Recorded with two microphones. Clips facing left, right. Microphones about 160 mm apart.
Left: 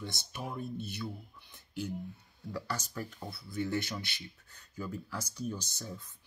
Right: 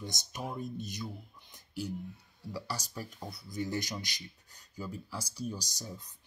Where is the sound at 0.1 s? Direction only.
40° right (ahead or behind).